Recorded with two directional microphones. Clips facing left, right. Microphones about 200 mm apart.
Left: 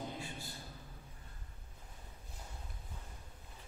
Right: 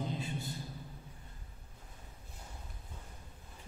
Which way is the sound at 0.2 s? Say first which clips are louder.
Right 6 dB; 20° right (ahead or behind).